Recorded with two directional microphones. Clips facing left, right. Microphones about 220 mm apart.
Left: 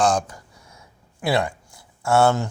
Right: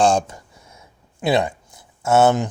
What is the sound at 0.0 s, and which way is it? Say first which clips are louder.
Speech: right 3 dB; 30° right (ahead or behind).